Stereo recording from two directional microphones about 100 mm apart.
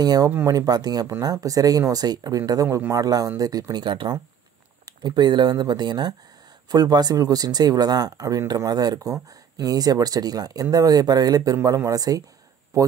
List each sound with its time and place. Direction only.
0.0 s speech: 40° right (ahead or behind)